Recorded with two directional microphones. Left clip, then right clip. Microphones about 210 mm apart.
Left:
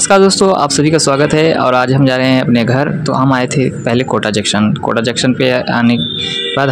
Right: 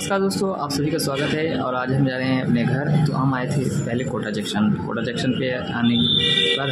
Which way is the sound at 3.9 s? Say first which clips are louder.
Left 12 dB; 35° left (ahead or behind).